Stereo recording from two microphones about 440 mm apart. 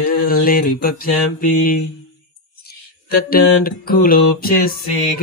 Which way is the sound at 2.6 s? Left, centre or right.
Left.